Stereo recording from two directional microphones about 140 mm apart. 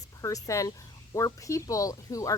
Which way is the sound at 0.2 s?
25° left (ahead or behind).